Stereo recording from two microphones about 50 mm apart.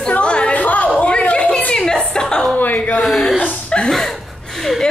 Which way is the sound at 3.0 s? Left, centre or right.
Centre.